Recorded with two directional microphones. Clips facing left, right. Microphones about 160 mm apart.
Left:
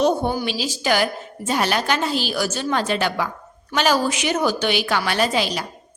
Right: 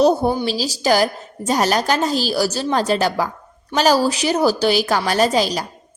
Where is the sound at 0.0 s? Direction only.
35° right (ahead or behind).